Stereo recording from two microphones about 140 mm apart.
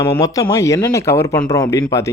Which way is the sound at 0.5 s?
20° left (ahead or behind).